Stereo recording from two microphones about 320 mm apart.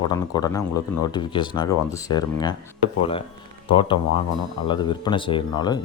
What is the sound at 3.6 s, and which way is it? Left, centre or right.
Speech, centre.